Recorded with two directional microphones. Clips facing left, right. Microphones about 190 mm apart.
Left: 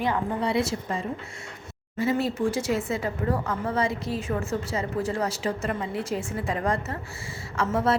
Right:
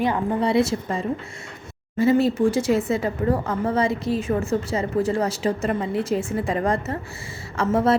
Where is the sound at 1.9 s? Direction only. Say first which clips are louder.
Right 7 dB; 30° right (ahead or behind).